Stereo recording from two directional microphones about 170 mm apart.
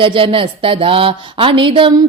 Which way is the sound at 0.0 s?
30° right (ahead or behind).